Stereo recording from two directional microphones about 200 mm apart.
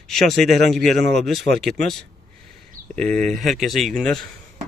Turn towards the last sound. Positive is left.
turn(degrees=5)  # may be behind; listen again after turning